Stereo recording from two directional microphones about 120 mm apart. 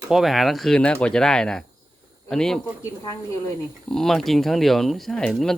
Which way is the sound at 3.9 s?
5° left (ahead or behind).